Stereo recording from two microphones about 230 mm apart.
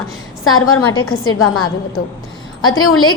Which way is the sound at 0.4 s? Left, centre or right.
Left.